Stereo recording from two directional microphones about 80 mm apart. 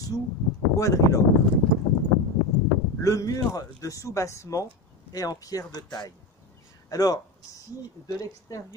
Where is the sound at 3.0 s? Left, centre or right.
Left.